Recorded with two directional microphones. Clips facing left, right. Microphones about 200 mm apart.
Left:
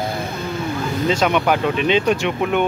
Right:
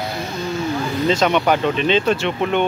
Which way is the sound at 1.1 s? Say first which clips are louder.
Right 1 dB; 10° left (ahead or behind).